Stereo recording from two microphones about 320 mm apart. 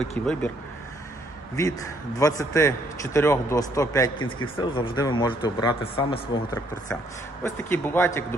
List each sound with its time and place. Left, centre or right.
0.0 s speech: centre
2.1 s a man's voice: centre
7.4 s a man's voice: centre